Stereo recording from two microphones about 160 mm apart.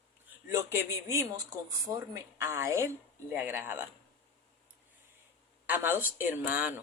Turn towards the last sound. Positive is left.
turn(degrees=-10)  # may be behind; listen again after turning